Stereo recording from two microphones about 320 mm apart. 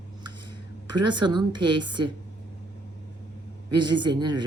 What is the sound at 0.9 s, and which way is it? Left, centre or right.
A woman's voice, centre.